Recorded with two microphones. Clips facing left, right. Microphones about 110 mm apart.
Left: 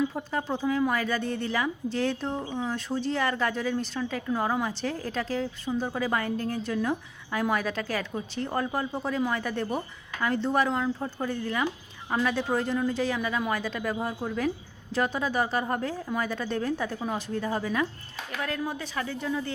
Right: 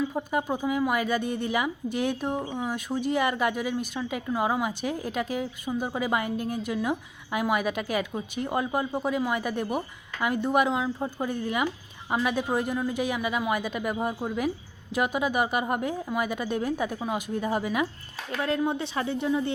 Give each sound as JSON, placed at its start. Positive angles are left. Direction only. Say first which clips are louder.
{"t": 0.1, "sound": "a woman's voice", "louder": "right 3 dB", "side_deg": -15}